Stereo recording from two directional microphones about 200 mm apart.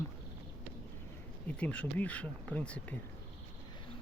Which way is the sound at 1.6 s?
5° left (ahead or behind).